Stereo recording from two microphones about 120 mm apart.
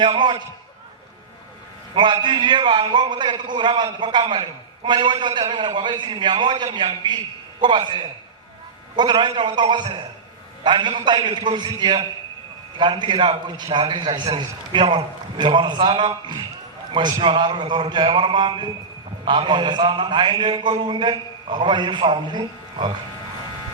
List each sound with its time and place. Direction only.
0.0 s a man's voice: 40° right (ahead or behind)
2.2 s a man's voice: 40° right (ahead or behind)